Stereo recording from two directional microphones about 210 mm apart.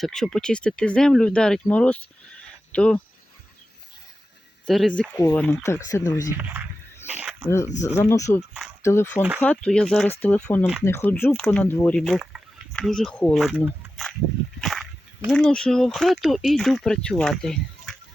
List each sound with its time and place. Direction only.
0.0 s speech: centre (ahead or behind)
4.6 s speech: centre (ahead or behind)
6.3 s speech: 10° right (ahead or behind)
7.1 s a sound: 10° right (ahead or behind)
7.6 s speech: 35° left (ahead or behind)
7.9 s speech: 15° left (ahead or behind)
14.6 s a sound: centre (ahead or behind)
15.3 s speech: 5° left (ahead or behind)